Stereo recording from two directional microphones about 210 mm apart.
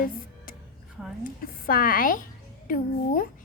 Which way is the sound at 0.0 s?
40° left (ahead or behind).